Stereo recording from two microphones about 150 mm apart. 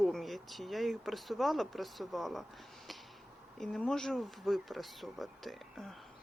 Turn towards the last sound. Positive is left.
turn(degrees=0)  # may be behind; listen again after turning